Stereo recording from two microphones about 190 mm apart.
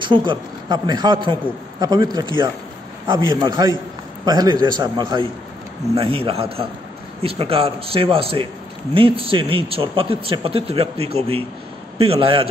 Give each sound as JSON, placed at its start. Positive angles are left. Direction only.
{"t": 0.0, "sound": "a man's voice", "side_deg": -25}